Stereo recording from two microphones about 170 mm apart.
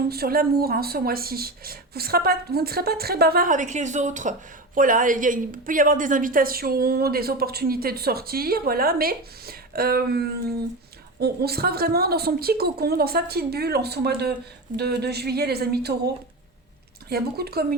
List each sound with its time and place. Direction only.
0.1 s a woman's voice: 65° right (ahead or behind)
17.1 s a woman's voice: 65° right (ahead or behind)